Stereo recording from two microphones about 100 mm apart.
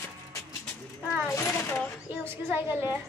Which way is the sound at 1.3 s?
30° left (ahead or behind).